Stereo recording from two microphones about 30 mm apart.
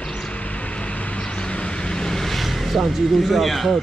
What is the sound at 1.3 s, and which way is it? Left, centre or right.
Vehicle, left.